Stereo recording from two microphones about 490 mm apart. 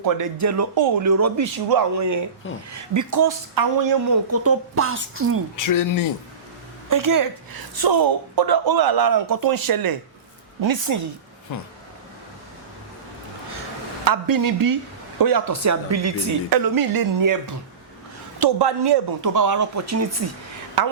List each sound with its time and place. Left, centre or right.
0.0 s speech: right
2.4 s speech: left
2.9 s speech: right
4.3 s a woman's voice: right
5.5 s speech: left
6.9 s a woman's voice: right
14.0 s speech: right
18.3 s a woman's voice: right
19.2 s speech: right
20.8 s a woman's voice: right